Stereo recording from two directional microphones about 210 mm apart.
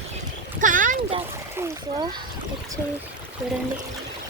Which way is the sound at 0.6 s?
40° right (ahead or behind).